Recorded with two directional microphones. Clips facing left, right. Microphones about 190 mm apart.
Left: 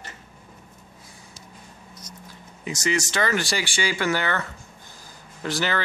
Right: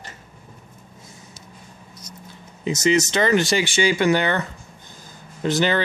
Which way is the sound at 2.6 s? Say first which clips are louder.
Right 7 dB; 20° right (ahead or behind).